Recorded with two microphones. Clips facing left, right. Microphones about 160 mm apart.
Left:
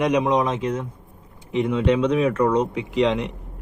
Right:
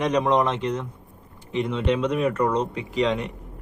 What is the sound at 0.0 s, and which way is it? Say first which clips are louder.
Speech: left 1 dB; 15° left (ahead or behind).